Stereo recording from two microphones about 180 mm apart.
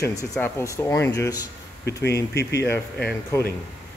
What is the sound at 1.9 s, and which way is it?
Speech, 65° left (ahead or behind).